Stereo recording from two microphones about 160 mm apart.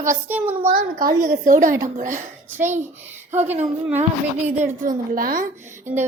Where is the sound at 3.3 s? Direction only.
10° right (ahead or behind).